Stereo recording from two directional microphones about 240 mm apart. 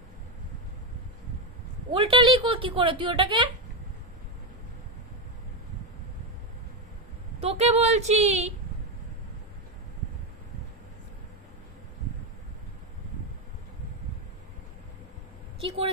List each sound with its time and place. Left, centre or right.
1.9 s a woman's voice: right
7.4 s a woman's voice: right